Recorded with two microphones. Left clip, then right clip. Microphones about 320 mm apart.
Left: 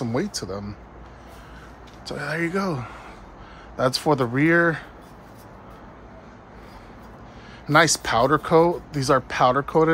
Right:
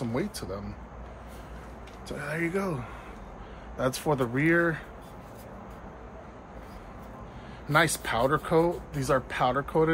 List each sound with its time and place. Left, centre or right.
0.1 s speech: left
2.0 s speech: left
7.6 s speech: left